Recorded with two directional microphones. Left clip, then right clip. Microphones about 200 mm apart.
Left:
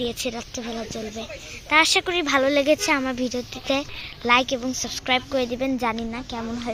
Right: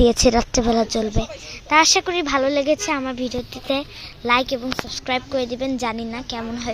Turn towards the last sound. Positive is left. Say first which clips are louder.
# right 3 dB
turn(degrees=0)  # may be behind; listen again after turning